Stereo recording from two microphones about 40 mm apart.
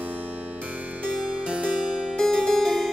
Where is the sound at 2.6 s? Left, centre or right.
Centre.